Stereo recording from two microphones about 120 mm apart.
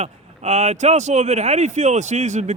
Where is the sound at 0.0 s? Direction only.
65° right (ahead or behind).